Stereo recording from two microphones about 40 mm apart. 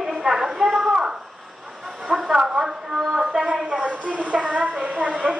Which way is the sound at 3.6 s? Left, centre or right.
Right.